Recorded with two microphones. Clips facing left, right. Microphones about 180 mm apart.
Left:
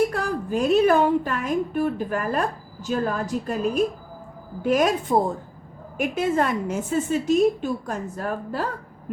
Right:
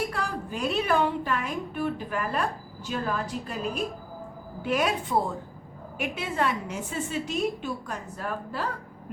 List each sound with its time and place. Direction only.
0.1 s a woman's voice: 45° left (ahead or behind)